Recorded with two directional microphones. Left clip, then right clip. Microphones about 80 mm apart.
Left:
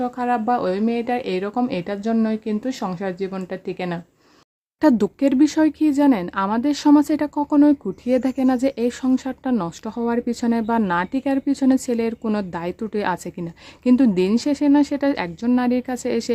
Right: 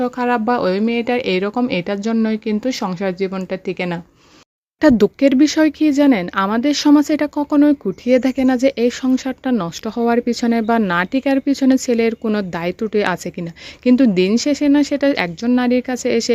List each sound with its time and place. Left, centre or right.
0.0 s speech: right
4.8 s speech: right
8.9 s speech: centre